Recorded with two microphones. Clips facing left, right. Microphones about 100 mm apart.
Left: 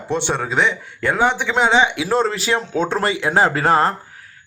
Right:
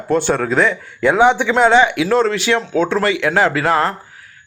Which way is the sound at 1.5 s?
10° left (ahead or behind).